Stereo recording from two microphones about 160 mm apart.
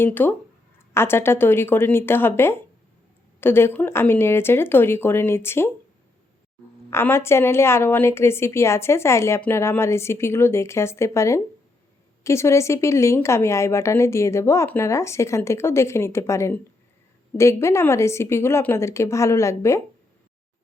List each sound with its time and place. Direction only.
0.0 s a woman's voice: 10° left (ahead or behind)
6.9 s a woman's voice: 15° left (ahead or behind)